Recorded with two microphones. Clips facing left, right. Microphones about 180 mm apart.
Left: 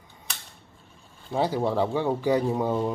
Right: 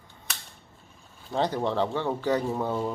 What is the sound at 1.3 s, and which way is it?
A man's voice, 10° left (ahead or behind).